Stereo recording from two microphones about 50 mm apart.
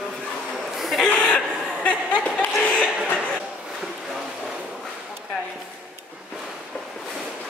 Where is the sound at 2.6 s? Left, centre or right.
Left.